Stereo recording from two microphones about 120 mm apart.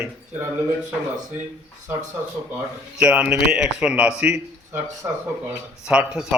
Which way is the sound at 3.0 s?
10° right (ahead or behind).